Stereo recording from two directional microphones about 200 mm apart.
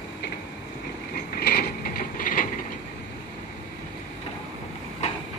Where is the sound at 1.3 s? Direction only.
50° left (ahead or behind).